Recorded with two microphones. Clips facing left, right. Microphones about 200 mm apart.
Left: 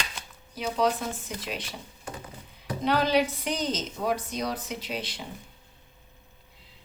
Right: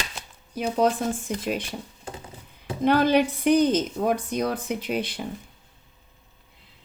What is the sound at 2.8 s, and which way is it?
A woman's voice, 50° right (ahead or behind).